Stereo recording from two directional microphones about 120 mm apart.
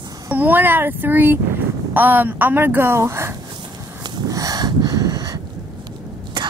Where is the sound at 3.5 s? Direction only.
35° right (ahead or behind).